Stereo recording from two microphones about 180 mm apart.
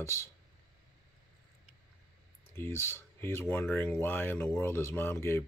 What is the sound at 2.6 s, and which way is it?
Speech, 15° left (ahead or behind).